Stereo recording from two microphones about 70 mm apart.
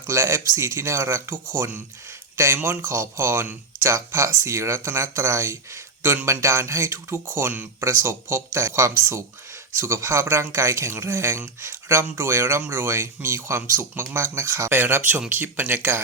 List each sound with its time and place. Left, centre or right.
0.1 s speech: right